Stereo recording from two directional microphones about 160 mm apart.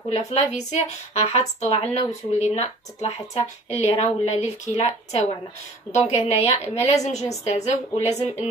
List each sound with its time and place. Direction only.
0.1 s speech: 45° left (ahead or behind)